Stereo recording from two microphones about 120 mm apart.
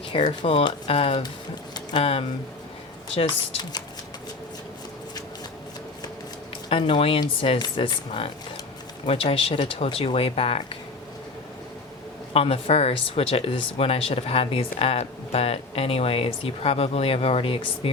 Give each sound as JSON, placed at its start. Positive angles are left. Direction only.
{"t": 0.1, "sound": "speech", "side_deg": 45}
{"t": 3.2, "sound": "speech", "side_deg": 40}
{"t": 6.7, "sound": "speech", "side_deg": 50}
{"t": 12.3, "sound": "speech", "side_deg": 55}